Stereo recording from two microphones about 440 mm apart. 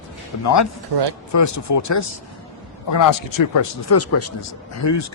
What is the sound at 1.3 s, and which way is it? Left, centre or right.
A man's voice, left.